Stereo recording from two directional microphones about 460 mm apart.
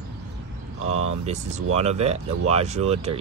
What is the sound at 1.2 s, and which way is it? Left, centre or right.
Speech, centre.